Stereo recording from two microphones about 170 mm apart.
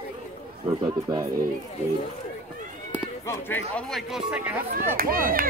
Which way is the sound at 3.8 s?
Centre (ahead or behind).